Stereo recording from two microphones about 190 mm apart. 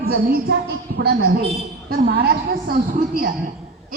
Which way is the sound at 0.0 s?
55° right (ahead or behind).